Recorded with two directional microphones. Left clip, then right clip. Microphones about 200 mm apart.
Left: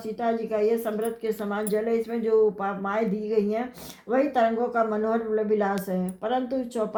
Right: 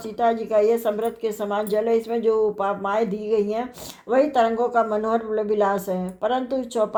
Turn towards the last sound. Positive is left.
turn(degrees=-40)  # may be behind; listen again after turning